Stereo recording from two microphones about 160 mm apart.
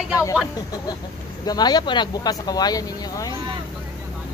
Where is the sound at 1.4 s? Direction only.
25° left (ahead or behind).